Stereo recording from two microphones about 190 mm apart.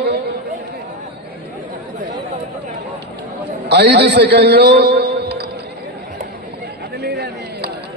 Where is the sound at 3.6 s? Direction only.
65° right (ahead or behind).